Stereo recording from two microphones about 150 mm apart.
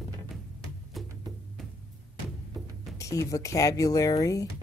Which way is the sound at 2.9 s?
20° left (ahead or behind).